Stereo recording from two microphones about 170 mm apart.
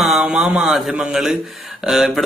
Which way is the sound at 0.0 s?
5° right (ahead or behind).